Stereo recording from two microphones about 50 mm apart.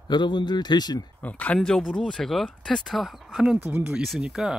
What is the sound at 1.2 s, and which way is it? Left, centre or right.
Speech, left.